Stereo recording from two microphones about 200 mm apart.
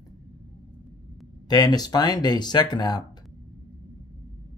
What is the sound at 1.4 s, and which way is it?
Speech, 20° left (ahead or behind).